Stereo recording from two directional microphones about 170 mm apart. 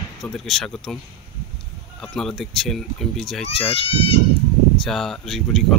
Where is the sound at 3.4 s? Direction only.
35° left (ahead or behind).